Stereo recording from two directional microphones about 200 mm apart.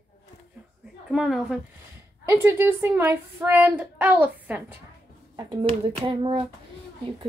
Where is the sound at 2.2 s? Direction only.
10° right (ahead or behind).